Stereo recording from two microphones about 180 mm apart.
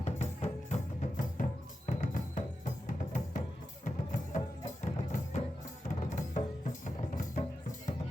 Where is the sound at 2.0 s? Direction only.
45° left (ahead or behind).